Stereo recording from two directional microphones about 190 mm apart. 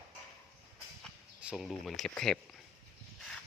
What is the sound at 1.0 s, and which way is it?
Speech, 5° right (ahead or behind).